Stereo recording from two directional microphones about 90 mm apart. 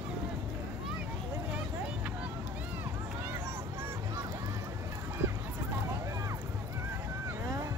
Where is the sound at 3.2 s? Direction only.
25° right (ahead or behind).